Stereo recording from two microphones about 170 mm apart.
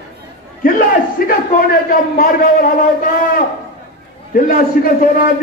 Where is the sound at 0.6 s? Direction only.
55° left (ahead or behind).